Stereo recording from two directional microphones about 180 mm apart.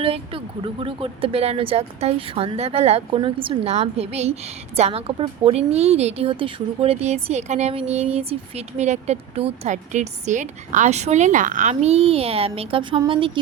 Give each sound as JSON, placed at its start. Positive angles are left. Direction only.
{"t": 0.0, "sound": "a woman's voice", "side_deg": -30}